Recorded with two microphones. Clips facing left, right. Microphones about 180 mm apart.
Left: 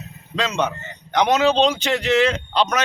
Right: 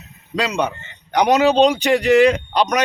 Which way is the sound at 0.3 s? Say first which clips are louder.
Right 2 dB; 15° right (ahead or behind).